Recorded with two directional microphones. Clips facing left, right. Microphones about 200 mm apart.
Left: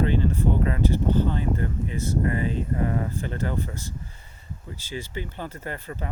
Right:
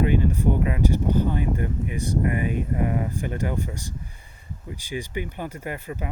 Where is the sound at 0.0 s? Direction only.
15° right (ahead or behind).